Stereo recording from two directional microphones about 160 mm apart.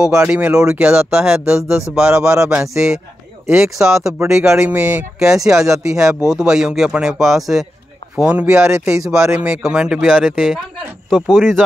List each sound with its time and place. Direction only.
0.0 s speech: 10° right (ahead or behind)
2.1 s a man's voice: 20° right (ahead or behind)
3.7 s speech: centre (ahead or behind)
4.5 s a man's voice: 15° right (ahead or behind)
6.2 s speech: 5° right (ahead or behind)
9.5 s speech: 5° right (ahead or behind)